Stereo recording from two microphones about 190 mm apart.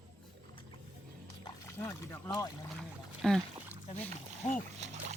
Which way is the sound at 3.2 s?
Centre (ahead or behind).